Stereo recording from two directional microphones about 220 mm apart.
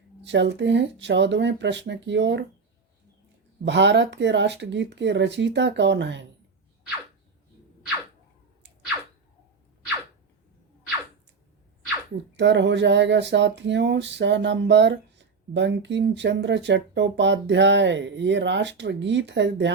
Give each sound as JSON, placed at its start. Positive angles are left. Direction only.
{"t": 0.3, "sound": "speech", "side_deg": -55}
{"t": 3.6, "sound": "speech", "side_deg": -55}
{"t": 12.4, "sound": "speech", "side_deg": -55}